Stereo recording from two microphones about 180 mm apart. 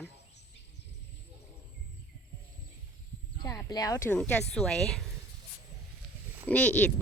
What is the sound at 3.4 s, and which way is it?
Speech, 20° left (ahead or behind).